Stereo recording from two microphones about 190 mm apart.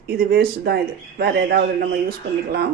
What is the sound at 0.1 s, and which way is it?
Speech, 55° right (ahead or behind).